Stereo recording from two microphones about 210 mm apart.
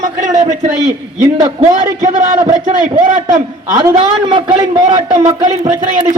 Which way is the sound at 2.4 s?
20° right (ahead or behind).